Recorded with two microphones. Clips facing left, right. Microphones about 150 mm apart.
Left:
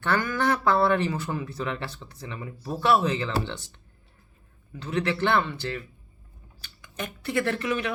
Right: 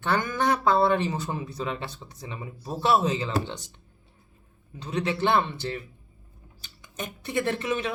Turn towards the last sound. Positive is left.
turn(degrees=-20)  # may be behind; listen again after turning